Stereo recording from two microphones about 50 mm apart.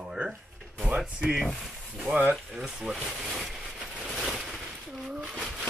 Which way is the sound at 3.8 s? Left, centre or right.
Centre.